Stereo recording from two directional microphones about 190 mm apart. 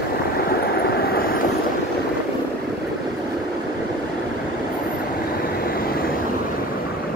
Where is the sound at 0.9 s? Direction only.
55° left (ahead or behind).